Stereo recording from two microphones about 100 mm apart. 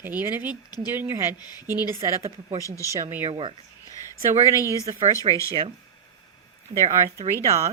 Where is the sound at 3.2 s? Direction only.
65° right (ahead or behind).